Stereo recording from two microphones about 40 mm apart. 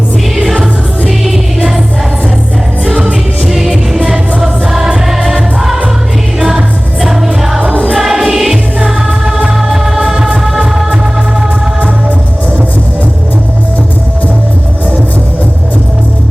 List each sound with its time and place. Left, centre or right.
0.4 s music: centre
2.9 s music: right
3.4 s music: centre
3.7 s music: centre
7.0 s music: centre
7.6 s music: right
7.9 s music: centre